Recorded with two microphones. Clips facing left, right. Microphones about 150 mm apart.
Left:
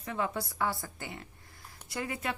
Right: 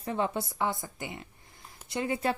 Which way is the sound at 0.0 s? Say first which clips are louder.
Right 3 dB; 30° right (ahead or behind).